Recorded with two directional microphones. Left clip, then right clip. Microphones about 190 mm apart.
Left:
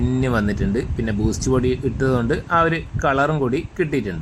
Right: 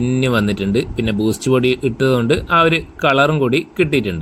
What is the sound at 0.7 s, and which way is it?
Speech, 15° left (ahead or behind).